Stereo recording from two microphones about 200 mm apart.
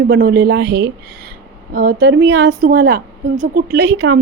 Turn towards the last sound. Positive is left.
turn(degrees=-60)  # may be behind; listen again after turning